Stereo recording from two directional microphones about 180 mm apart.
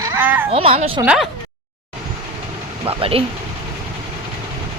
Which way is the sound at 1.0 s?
5° right (ahead or behind).